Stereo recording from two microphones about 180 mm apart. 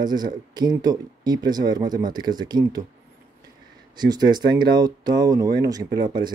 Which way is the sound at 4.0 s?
25° right (ahead or behind).